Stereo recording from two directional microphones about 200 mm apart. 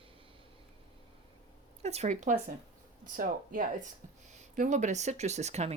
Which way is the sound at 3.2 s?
45° right (ahead or behind).